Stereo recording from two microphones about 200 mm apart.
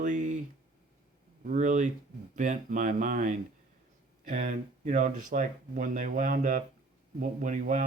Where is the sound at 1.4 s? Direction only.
40° right (ahead or behind).